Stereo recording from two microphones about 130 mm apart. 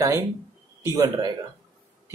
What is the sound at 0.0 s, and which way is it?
Speech, 25° right (ahead or behind).